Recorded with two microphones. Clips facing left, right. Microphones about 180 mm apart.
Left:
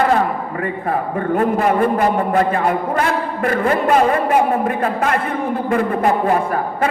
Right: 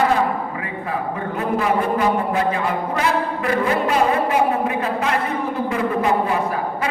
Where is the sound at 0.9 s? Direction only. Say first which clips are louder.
Left 5 dB; 50° left (ahead or behind).